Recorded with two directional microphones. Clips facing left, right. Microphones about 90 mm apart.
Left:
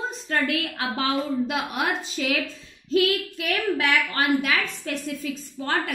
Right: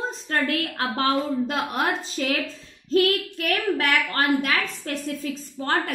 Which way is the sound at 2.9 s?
40° right (ahead or behind).